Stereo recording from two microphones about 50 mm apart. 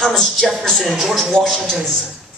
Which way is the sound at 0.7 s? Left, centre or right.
Centre.